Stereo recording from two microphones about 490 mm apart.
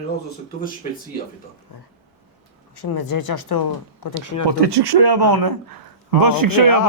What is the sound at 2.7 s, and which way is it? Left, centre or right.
Speech, left.